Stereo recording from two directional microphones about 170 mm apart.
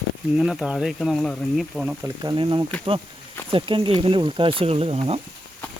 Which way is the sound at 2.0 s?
25° right (ahead or behind).